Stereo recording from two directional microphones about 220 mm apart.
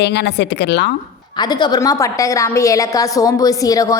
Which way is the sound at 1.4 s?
20° left (ahead or behind).